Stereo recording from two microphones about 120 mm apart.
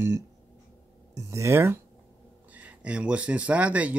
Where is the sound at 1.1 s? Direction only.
25° right (ahead or behind).